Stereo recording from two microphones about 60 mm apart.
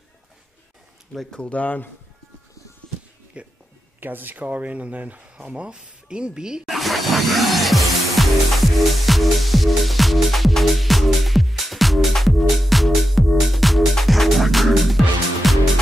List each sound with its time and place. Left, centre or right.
1.1 s speech: centre
1.4 s speech: left
3.4 s speech: right
4.0 s speech: right; by 6.6 s centre
6.7 s music: centre